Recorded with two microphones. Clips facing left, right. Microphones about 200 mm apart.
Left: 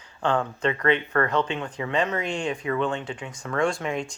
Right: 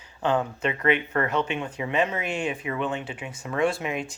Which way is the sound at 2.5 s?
20° right (ahead or behind).